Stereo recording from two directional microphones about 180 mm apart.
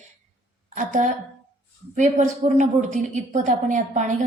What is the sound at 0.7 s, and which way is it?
A woman's voice, 45° right (ahead or behind).